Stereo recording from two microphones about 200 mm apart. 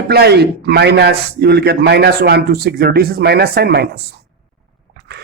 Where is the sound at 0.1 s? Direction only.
55° right (ahead or behind).